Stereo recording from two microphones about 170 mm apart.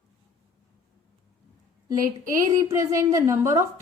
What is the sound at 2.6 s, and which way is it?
A woman's voice, 20° right (ahead or behind).